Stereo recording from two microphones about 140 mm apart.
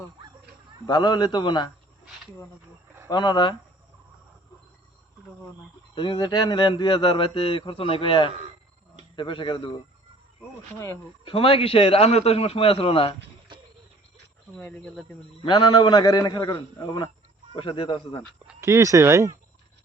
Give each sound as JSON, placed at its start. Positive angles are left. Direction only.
{"t": 0.9, "sound": "speech", "side_deg": 30}
{"t": 3.1, "sound": "speech", "side_deg": 30}
{"t": 5.9, "sound": "speech", "side_deg": 35}
{"t": 11.3, "sound": "a man's voice", "side_deg": 40}
{"t": 14.5, "sound": "speech", "side_deg": 10}
{"t": 15.4, "sound": "speech", "side_deg": 35}
{"t": 18.6, "sound": "speech", "side_deg": -20}